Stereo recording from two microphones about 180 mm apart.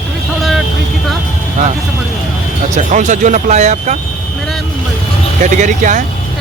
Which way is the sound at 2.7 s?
40° right (ahead or behind).